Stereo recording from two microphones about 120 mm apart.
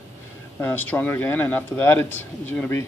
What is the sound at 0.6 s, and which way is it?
A man's voice, 15° left (ahead or behind).